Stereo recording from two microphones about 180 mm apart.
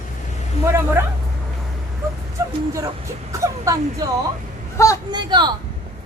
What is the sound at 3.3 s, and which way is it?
Speech, 15° right (ahead or behind).